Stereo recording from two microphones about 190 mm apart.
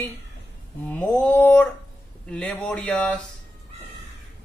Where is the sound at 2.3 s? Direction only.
5° left (ahead or behind).